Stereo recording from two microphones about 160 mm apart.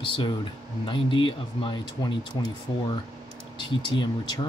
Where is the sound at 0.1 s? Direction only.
30° left (ahead or behind).